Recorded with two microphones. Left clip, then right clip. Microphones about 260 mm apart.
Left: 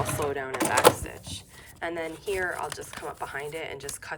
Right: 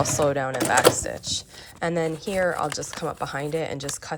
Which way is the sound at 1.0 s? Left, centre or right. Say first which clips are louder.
Right 11 dB; centre.